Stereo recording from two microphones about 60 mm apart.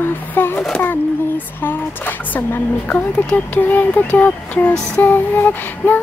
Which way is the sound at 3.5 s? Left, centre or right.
Left.